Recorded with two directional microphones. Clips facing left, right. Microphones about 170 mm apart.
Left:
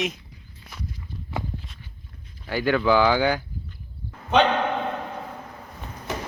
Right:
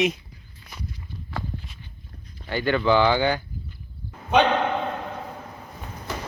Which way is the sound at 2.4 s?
5° left (ahead or behind).